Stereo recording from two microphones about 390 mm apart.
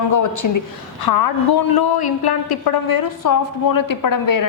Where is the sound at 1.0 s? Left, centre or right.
Left.